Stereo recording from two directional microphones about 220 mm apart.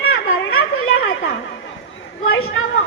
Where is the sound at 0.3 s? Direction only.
65° left (ahead or behind).